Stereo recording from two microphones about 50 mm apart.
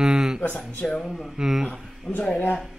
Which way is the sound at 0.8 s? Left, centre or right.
Centre.